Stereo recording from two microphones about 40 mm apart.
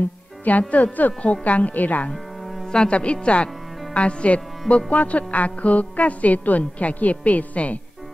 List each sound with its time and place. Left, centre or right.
0.5 s music: left
2.6 s music: centre
2.9 s speech: left
3.9 s music: left